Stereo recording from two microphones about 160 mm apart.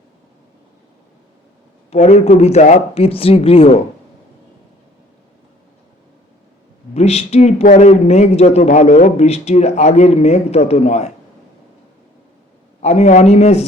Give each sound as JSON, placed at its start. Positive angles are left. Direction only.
{"t": 1.9, "sound": "speech", "side_deg": 40}
{"t": 6.9, "sound": "a man's voice", "side_deg": 40}
{"t": 12.8, "sound": "a man's voice", "side_deg": 45}